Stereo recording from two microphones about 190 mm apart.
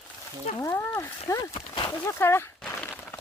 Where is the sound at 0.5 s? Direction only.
15° left (ahead or behind).